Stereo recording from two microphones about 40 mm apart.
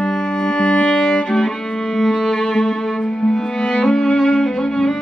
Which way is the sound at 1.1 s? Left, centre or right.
Left.